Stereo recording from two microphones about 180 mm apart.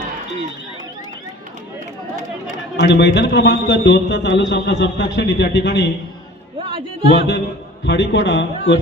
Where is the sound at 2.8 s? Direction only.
75° left (ahead or behind).